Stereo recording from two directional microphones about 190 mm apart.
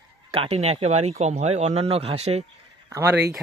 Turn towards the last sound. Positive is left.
turn(degrees=-10)  # may be behind; listen again after turning